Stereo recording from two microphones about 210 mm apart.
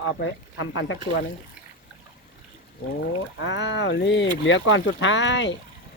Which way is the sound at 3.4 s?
60° left (ahead or behind).